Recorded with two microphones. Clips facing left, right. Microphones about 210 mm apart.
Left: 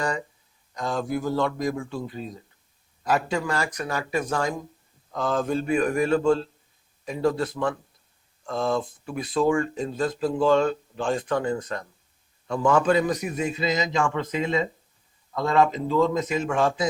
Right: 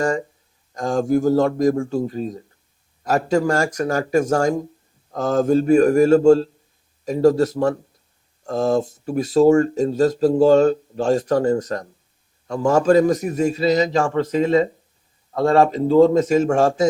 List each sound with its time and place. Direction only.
0.0 s a man's voice: 45° right (ahead or behind)